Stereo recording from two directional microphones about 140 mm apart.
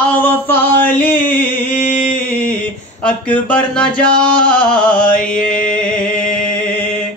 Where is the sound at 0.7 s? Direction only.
10° left (ahead or behind).